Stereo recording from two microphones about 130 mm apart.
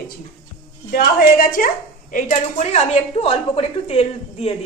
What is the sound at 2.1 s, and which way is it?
Speech, 65° left (ahead or behind).